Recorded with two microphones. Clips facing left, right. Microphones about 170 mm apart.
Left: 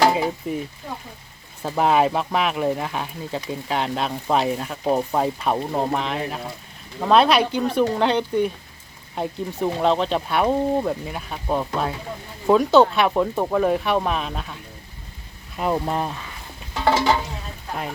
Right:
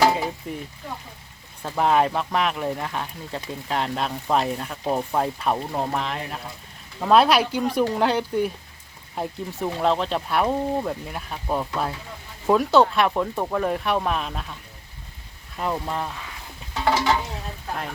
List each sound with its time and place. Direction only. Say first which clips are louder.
0.0 s a sound: left 2 dB; 15° left (ahead or behind)
1.6 s speech: left 2 dB; 5° left (ahead or behind)
15.5 s speech: left 4 dB; 15° left (ahead or behind)